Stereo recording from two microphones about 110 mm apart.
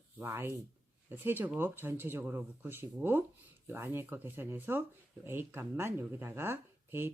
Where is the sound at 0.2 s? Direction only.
20° right (ahead or behind).